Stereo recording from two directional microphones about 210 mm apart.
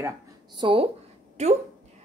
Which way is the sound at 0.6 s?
25° right (ahead or behind).